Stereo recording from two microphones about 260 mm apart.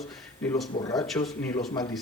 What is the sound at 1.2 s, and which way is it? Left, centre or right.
Speech, centre.